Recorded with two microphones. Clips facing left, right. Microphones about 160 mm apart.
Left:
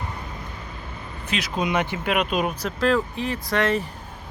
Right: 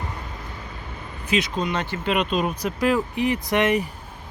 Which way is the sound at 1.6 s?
15° left (ahead or behind).